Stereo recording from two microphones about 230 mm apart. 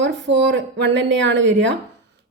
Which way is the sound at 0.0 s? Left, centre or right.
Right.